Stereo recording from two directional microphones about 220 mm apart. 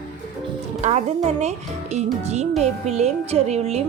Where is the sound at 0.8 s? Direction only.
30° right (ahead or behind).